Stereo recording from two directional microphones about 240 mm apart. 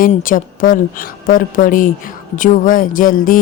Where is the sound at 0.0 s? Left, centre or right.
Left.